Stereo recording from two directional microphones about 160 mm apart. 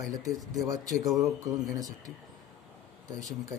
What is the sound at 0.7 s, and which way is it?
Speech, 20° right (ahead or behind).